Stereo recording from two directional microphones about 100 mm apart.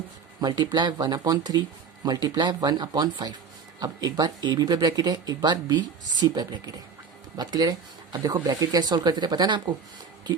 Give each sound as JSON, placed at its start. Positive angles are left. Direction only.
{"t": 0.4, "sound": "speech", "side_deg": -45}